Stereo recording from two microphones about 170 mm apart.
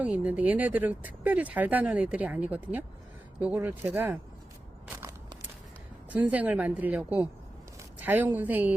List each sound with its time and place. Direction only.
0.0 s speech: 10° right (ahead or behind)
4.9 s a sound: 15° right (ahead or behind)
6.1 s speech: 10° right (ahead or behind)